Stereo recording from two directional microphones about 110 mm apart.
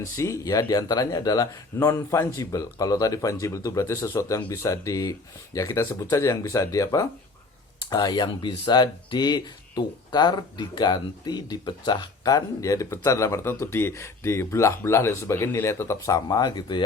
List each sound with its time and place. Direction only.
0.2 s speech: 25° left (ahead or behind)
1.8 s speech: 20° left (ahead or behind); by 16.8 s 40° left (ahead or behind)